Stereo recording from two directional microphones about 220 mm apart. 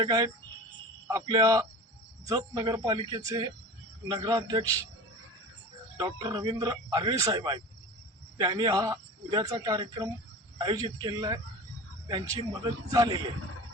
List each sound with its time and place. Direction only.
0.0 s a man's voice: 20° right (ahead or behind)
6.0 s a man's voice: 20° right (ahead or behind)